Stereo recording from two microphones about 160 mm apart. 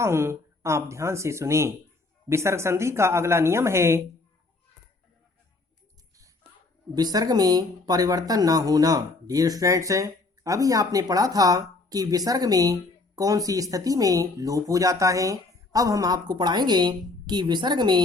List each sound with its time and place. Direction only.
0.0 s speech: 15° right (ahead or behind)
6.9 s speech: 25° right (ahead or behind)